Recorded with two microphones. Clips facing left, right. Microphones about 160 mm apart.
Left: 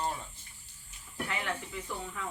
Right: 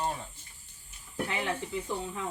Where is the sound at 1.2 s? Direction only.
25° right (ahead or behind).